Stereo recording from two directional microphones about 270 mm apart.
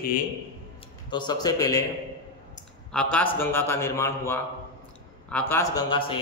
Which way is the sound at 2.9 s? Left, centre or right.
Centre.